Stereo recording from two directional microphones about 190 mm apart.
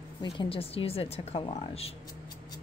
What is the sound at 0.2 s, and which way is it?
A woman's voice, 25° left (ahead or behind).